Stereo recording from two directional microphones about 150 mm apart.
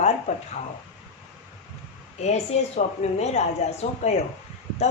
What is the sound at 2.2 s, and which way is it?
A woman's voice, 45° left (ahead or behind).